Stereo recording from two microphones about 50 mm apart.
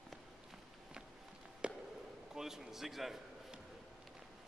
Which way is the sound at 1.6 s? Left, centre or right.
Right.